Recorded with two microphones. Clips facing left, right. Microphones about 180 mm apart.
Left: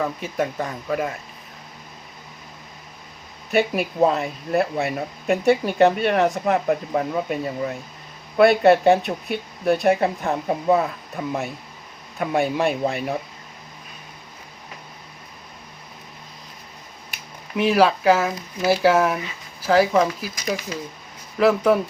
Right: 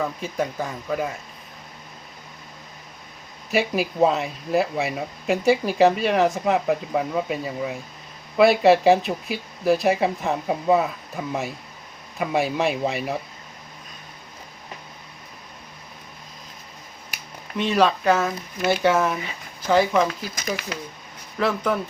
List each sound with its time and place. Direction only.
0.0 s speech: centre (ahead or behind)
3.5 s speech: centre (ahead or behind)
17.6 s speech: 5° left (ahead or behind)
21.3 s speech: 10° left (ahead or behind)